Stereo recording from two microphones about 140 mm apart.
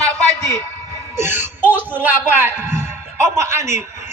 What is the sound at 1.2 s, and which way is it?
Music, 15° right (ahead or behind).